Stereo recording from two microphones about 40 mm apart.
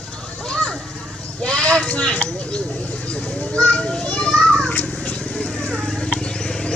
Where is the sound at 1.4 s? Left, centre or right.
Left.